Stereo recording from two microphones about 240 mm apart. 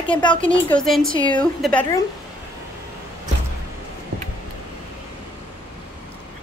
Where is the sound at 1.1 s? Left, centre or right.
Centre.